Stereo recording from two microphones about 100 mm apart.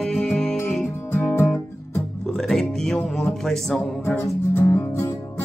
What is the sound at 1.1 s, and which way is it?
Music, 25° left (ahead or behind).